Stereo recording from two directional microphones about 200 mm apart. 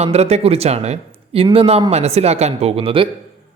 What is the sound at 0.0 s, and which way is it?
Speech, 30° right (ahead or behind).